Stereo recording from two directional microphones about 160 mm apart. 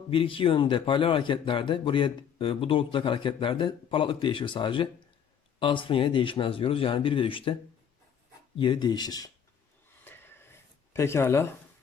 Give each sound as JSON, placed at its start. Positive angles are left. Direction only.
{"t": 0.1, "sound": "speech", "side_deg": 35}
{"t": 8.5, "sound": "speech", "side_deg": 30}
{"t": 10.0, "sound": "a sound", "side_deg": 15}